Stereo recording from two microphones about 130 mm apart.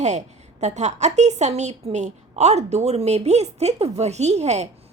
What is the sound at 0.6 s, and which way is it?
A woman's voice, 60° right (ahead or behind).